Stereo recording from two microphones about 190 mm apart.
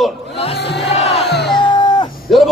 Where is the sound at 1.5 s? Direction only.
25° left (ahead or behind).